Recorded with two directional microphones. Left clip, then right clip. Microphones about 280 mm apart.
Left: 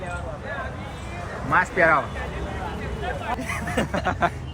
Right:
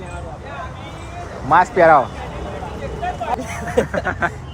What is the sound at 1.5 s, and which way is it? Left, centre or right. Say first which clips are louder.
Speech: right 7 dB; centre.